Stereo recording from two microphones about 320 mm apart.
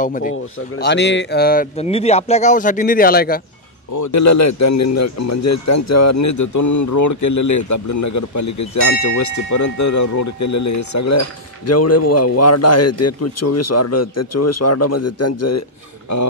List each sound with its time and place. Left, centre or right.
0.0 s speech: left
3.9 s a man's voice: left